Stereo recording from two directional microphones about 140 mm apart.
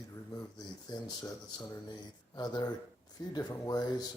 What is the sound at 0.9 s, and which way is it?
Speech, 30° left (ahead or behind).